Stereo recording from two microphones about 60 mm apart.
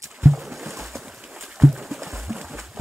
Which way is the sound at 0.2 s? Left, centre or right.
Centre.